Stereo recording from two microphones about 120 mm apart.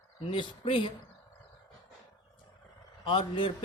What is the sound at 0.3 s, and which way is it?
Speech, 45° left (ahead or behind).